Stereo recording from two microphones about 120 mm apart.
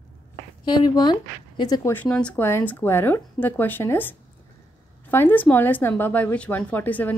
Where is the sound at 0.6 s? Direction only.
35° left (ahead or behind).